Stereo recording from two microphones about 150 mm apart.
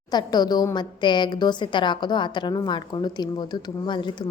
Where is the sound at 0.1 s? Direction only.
25° left (ahead or behind).